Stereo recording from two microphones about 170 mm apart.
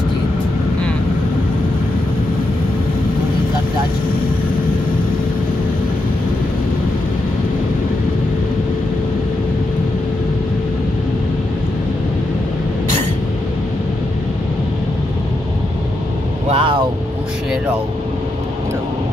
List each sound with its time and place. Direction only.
16.4 s vehicle: 35° right (ahead or behind)